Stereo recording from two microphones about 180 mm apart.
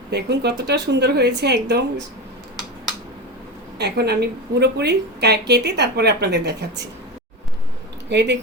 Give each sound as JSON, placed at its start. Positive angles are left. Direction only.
{"t": 0.1, "sound": "a woman's voice", "side_deg": -65}
{"t": 3.8, "sound": "a woman's voice", "side_deg": -65}
{"t": 8.1, "sound": "a woman's voice", "side_deg": -75}